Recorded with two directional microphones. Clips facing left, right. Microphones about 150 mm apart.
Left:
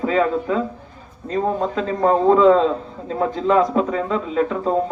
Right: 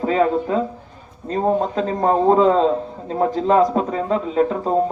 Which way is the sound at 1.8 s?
35° right (ahead or behind).